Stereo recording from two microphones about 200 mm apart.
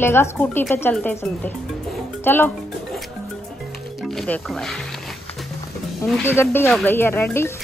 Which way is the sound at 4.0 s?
Centre (ahead or behind).